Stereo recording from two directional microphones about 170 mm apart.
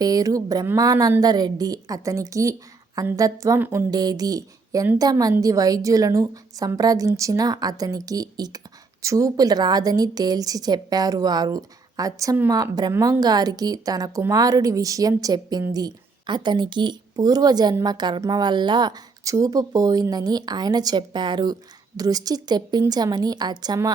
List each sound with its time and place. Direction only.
0.0 s a woman's voice: 20° right (ahead or behind)